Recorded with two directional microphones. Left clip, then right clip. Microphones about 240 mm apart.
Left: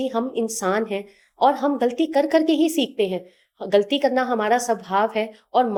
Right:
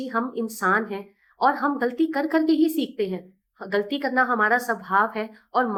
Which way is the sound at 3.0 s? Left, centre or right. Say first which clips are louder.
Left 5 dB; centre.